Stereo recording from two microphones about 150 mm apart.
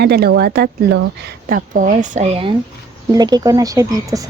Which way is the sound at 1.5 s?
65° right (ahead or behind).